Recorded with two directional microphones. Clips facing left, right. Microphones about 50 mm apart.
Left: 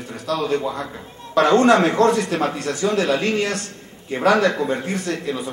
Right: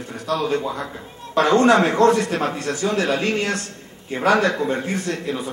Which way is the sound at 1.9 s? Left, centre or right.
Right.